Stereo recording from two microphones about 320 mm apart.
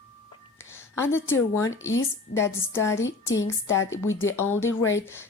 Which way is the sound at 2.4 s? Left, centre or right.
Centre.